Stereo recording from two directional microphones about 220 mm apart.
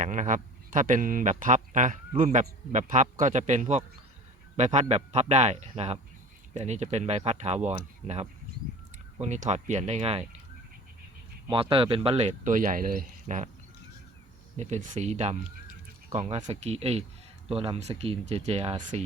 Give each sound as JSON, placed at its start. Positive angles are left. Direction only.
{"t": 0.0, "sound": "speech", "side_deg": -35}
{"t": 11.5, "sound": "speech", "side_deg": -25}
{"t": 14.5, "sound": "speech", "side_deg": -30}